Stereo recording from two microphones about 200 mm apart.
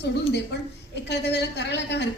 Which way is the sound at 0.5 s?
55° left (ahead or behind).